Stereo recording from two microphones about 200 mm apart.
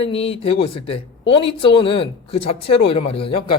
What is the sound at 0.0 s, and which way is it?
Speech, 30° left (ahead or behind).